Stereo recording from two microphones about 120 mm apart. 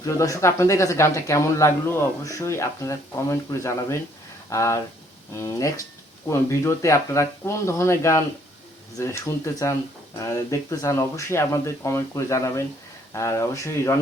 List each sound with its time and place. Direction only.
0.0 s speech: 25° left (ahead or behind)